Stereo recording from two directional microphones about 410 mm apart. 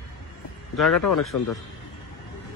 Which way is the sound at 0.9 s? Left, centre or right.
Left.